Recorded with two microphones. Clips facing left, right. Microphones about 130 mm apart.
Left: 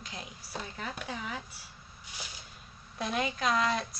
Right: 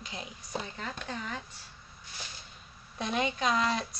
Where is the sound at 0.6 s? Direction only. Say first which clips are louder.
Even; 5° left (ahead or behind).